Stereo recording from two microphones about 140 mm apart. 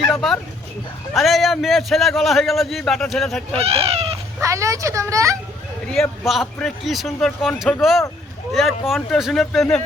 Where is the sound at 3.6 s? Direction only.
45° right (ahead or behind).